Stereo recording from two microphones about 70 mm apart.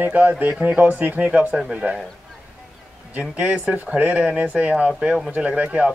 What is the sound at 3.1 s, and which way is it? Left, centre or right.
Speech, right.